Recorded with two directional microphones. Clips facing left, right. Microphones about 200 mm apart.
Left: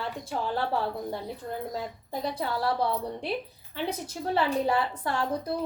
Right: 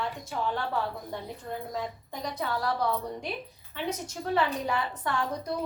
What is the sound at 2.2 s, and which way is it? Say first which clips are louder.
A woman's voice: left 2 dB; 30° left (ahead or behind).